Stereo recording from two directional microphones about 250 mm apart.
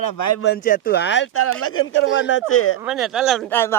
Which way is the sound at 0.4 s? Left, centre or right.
Left.